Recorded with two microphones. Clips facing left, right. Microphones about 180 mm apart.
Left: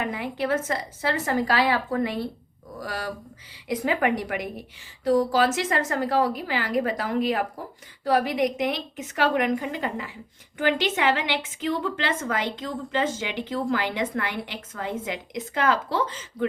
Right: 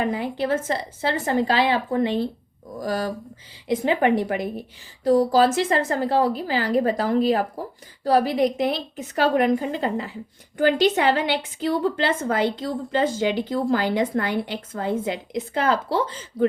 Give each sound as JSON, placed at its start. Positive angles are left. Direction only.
{"t": 0.0, "sound": "a woman's voice", "side_deg": -30}